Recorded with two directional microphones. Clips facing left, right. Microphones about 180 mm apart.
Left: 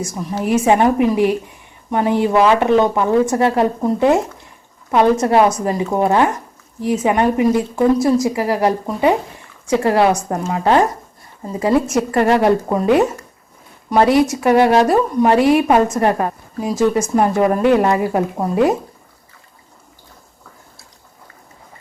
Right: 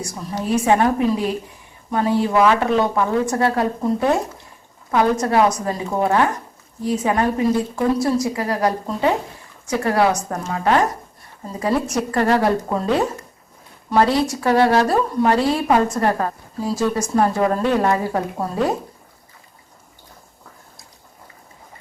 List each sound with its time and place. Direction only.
0.5 s a woman's voice: 20° left (ahead or behind)